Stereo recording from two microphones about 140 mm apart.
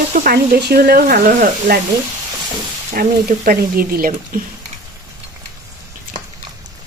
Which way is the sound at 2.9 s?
80° right.